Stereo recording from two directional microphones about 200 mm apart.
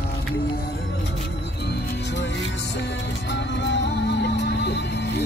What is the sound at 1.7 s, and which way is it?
Music, 55° left (ahead or behind).